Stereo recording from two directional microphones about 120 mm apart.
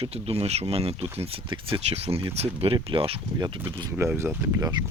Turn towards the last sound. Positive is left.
turn(degrees=-20)  # may be behind; listen again after turning